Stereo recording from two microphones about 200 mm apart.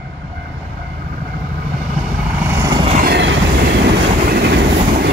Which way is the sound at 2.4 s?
15° right (ahead or behind).